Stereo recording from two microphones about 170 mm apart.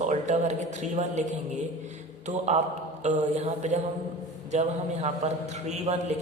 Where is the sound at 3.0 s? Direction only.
40° right (ahead or behind).